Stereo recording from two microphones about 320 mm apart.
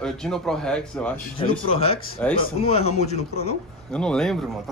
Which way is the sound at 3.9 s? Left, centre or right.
Centre.